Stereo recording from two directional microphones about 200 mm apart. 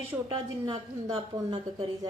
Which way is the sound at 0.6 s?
20° right (ahead or behind).